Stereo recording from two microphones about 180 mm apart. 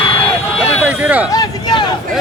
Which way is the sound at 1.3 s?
25° left (ahead or behind).